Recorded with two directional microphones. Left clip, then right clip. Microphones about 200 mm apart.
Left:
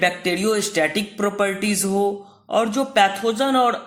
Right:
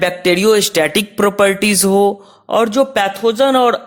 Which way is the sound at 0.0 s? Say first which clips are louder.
Right 7 dB; 50° right (ahead or behind).